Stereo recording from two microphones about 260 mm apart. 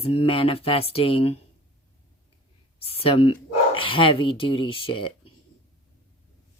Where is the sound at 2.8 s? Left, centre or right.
Left.